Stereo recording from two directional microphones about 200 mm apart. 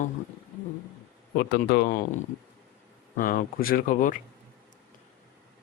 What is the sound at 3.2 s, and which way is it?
Speech, 45° left (ahead or behind).